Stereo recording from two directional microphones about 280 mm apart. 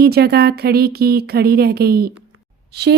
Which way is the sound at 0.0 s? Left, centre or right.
Right.